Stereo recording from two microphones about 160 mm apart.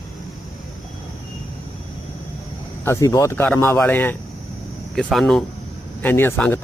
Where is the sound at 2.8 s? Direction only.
20° left (ahead or behind).